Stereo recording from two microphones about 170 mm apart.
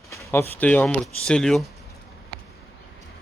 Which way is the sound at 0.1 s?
15° left (ahead or behind).